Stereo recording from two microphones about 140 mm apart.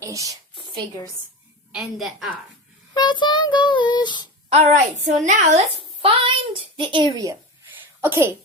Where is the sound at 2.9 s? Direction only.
35° left (ahead or behind).